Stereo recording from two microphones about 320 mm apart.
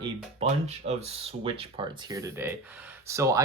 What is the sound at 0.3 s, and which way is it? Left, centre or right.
Speech, centre.